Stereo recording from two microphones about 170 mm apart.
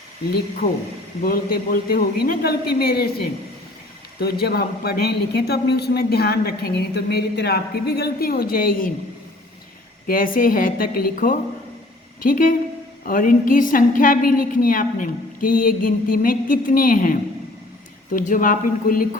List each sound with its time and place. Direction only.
1.2 s a woman's voice: 60° left (ahead or behind)
10.1 s a woman's voice: 55° left (ahead or behind)